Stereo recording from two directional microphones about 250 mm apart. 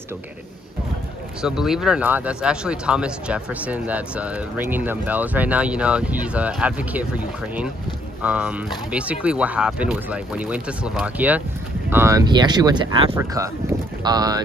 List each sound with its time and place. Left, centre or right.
1.4 s speech: centre